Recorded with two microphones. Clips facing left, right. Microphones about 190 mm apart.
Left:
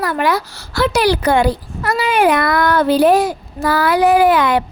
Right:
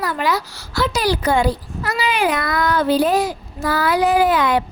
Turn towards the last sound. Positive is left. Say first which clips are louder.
# left 4 dB
turn(degrees=70)  # may be behind; listen again after turning